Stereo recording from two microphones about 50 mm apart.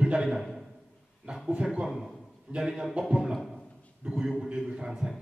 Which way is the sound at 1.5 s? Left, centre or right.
Centre.